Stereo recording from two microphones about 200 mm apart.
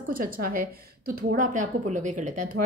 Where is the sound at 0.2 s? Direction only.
45° right (ahead or behind).